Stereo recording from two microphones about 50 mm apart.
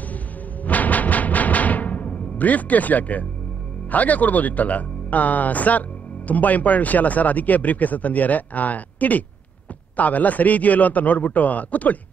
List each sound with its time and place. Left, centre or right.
0.7 s timpani: left
3.9 s speech: left